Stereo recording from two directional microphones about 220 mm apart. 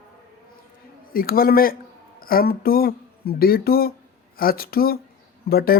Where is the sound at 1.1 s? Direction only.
40° left (ahead or behind).